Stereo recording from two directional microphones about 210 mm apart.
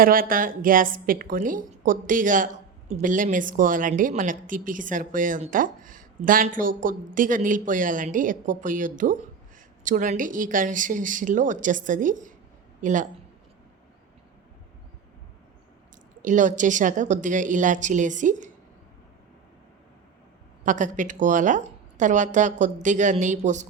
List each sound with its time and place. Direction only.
0.0 s a woman's voice: 45° right (ahead or behind)
16.2 s a woman's voice: 35° right (ahead or behind)
20.7 s a woman's voice: 35° right (ahead or behind)